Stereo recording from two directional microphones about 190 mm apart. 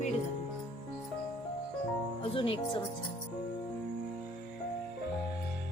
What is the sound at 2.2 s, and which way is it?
Speech, 30° left (ahead or behind).